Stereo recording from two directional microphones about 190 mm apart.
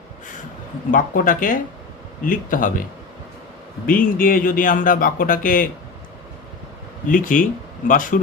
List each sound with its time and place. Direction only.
0.9 s speech: 45° left (ahead or behind)
3.8 s speech: 45° left (ahead or behind)
7.1 s speech: 45° left (ahead or behind)